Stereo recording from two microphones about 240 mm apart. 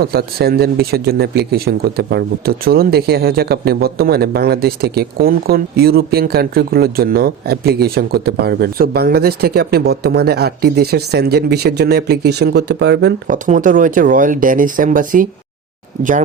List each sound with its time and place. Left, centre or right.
0.0 s speech: right
13.3 s speech: right